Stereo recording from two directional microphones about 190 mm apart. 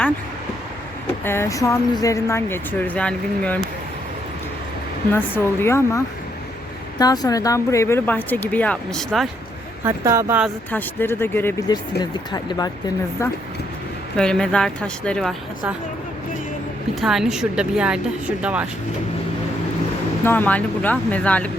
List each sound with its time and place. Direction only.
1.2 s speech: 10° left (ahead or behind)
5.1 s speech: 10° left (ahead or behind)
7.0 s speech: 20° left (ahead or behind); by 9.3 s centre (ahead or behind)
9.8 s speech: 15° right (ahead or behind)
10.7 s speech: 10° left (ahead or behind)
14.2 s a woman's voice: 5° left (ahead or behind)
16.9 s a woman's voice: centre (ahead or behind)
20.2 s speech: 10° left (ahead or behind)